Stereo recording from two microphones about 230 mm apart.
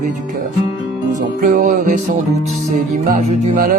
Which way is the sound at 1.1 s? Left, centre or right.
Right.